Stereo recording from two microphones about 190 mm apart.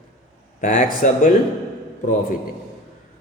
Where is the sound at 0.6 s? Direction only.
45° left (ahead or behind).